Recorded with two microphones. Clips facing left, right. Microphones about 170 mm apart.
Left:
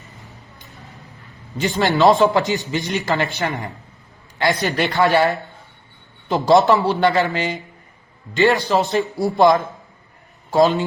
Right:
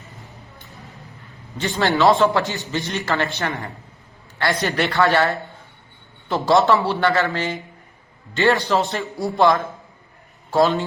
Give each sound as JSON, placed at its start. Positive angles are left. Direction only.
{"t": 1.5, "sound": "a man's voice", "side_deg": 15}